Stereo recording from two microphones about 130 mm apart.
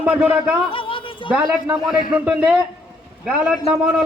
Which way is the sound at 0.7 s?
40° left (ahead or behind).